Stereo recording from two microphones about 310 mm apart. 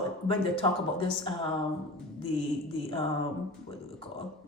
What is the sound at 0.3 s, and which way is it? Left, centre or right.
Speech, centre.